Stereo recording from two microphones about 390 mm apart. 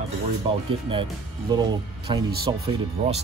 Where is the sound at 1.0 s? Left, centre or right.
Centre.